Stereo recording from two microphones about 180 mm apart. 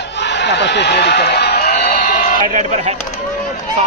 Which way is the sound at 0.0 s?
75° left (ahead or behind).